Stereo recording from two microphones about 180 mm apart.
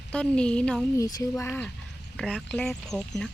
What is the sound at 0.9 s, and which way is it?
Speech, 20° left (ahead or behind).